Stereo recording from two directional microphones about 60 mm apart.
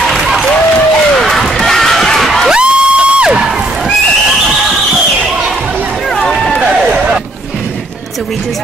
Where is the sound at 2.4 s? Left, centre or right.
Centre.